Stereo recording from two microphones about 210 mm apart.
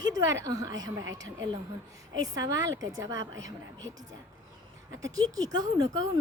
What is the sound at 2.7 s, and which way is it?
Speech, 60° right (ahead or behind).